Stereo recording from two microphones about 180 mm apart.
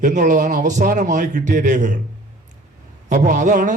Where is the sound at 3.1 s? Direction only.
45° right (ahead or behind).